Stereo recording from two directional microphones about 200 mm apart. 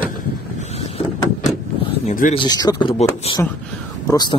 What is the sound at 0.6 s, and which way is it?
Vehicle, 30° left (ahead or behind).